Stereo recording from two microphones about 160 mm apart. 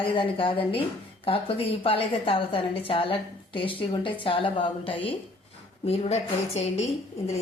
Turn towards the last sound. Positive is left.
turn(degrees=40)  # may be behind; listen again after turning